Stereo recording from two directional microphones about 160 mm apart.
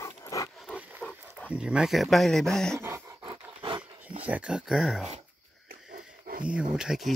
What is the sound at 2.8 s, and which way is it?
Dog, 15° right (ahead or behind).